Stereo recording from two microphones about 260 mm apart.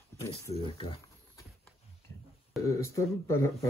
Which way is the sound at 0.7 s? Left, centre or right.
Centre.